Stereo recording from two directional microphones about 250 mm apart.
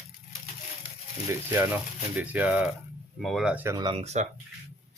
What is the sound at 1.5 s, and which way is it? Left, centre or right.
Speech, centre.